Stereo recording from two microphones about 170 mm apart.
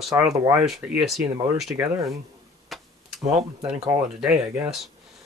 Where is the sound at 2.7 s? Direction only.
Centre (ahead or behind).